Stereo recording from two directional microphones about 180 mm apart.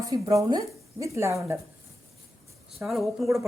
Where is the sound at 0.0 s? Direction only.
20° right (ahead or behind).